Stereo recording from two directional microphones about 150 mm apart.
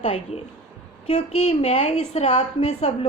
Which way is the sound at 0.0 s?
40° left (ahead or behind).